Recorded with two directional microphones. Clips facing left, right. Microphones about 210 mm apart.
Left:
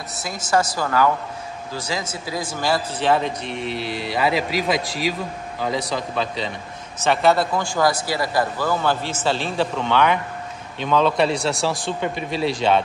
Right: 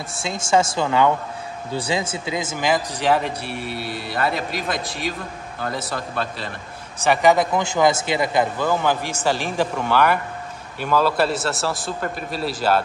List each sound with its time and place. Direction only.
0.2 s a woman's voice: 25° right (ahead or behind); by 6.5 s centre (ahead or behind)
7.0 s a man's voice: 15° right (ahead or behind)